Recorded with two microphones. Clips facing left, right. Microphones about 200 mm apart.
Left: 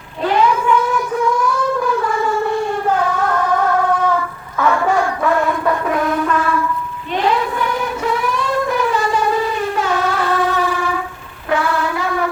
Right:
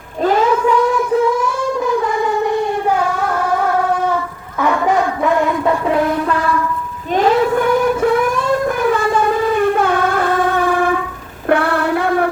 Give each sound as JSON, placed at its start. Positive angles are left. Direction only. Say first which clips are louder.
{"t": 0.2, "sound": "child singing", "louder": "right 2 dB", "side_deg": -45}
{"t": 2.2, "sound": "siren", "louder": "right 2 dB", "side_deg": -15}
{"t": 4.6, "sound": "child singing", "louder": "right 1 dB", "side_deg": -20}
{"t": 7.1, "sound": "child singing", "louder": "right 5 dB", "side_deg": -45}